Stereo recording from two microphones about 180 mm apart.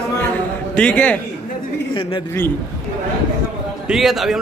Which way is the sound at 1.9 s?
25° left (ahead or behind).